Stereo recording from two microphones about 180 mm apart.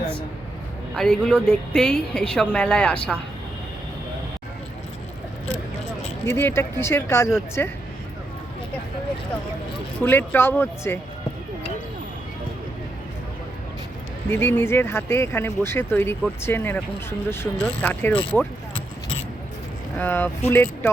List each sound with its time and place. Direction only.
0.9 s a woman's voice: 5° left (ahead or behind)
6.2 s speech: 15° left (ahead or behind)
10.0 s speech: 10° left (ahead or behind)
14.3 s speech: 15° left (ahead or behind)
20.0 s speech: 10° left (ahead or behind)